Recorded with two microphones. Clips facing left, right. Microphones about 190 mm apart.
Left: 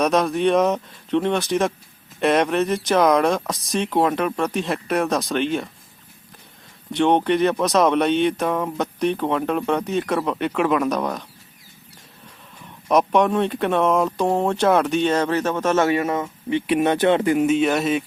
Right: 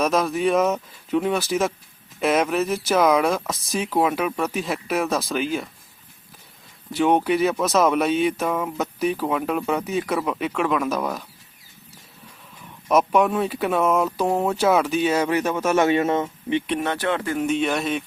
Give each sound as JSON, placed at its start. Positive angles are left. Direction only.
{"t": 0.0, "sound": "speech", "side_deg": 0}
{"t": 6.9, "sound": "speech", "side_deg": -5}
{"t": 12.9, "sound": "speech", "side_deg": -5}
{"t": 16.8, "sound": "speech", "side_deg": 20}
{"t": 17.3, "sound": "speech", "side_deg": 5}